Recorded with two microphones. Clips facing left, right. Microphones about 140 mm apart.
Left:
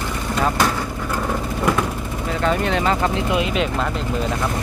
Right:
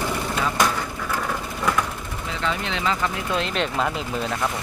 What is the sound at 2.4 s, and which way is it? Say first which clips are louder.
Speech: left 6 dB; 50° left (ahead or behind).